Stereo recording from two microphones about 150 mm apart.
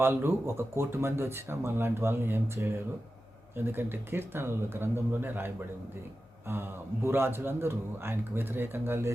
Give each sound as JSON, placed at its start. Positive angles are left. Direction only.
{"t": 0.0, "sound": "speech", "side_deg": -15}
{"t": 6.5, "sound": "speech", "side_deg": -15}